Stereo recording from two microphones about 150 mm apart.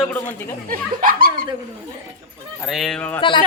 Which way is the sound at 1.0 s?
70° right (ahead or behind).